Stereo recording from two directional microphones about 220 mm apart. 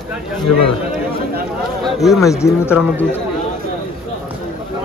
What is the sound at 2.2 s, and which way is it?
Speech, 15° left (ahead or behind).